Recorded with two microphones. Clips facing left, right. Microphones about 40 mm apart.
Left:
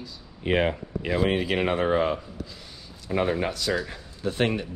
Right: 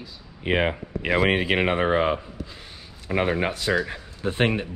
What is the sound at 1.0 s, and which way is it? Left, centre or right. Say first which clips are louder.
Speech: right 3 dB; right.